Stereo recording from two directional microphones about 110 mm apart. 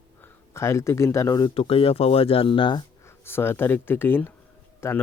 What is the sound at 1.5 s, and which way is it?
Speech, 60° left (ahead or behind).